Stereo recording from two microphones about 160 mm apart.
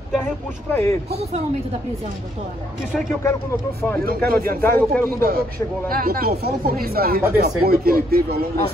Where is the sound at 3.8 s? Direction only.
10° left (ahead or behind).